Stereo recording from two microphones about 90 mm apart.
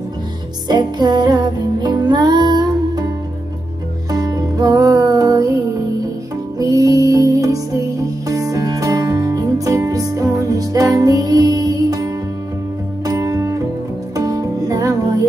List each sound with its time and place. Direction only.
0.7 s music: 55° right (ahead or behind)
4.1 s music: 45° right (ahead or behind)
6.6 s music: 40° right (ahead or behind)